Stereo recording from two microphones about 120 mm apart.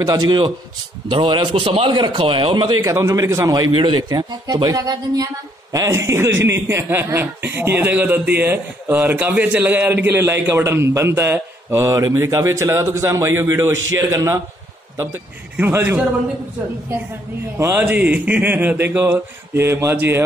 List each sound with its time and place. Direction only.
0.0 s a man's voice: 35° right (ahead or behind)
3.7 s speech: 40° right (ahead or behind); by 16.0 s 20° right (ahead or behind)
17.6 s speech: 25° right (ahead or behind)
17.8 s speech: 15° right (ahead or behind)